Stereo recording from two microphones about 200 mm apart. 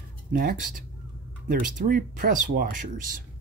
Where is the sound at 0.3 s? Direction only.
45° right (ahead or behind).